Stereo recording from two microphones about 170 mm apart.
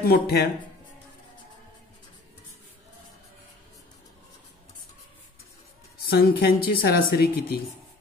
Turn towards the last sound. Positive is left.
turn(degrees=65)  # may be behind; listen again after turning